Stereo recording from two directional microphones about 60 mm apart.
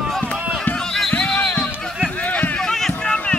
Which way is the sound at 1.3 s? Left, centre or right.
Left.